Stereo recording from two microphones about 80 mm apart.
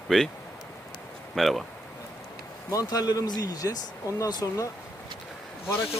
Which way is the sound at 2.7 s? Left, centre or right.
Left.